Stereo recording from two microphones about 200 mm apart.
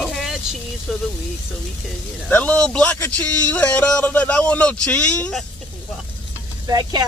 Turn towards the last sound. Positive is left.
turn(degrees=-20)  # may be behind; listen again after turning